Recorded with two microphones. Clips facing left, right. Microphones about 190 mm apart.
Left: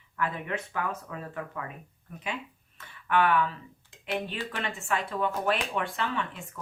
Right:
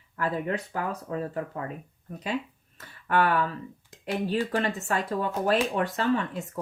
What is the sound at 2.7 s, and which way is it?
Speech, 40° right (ahead or behind).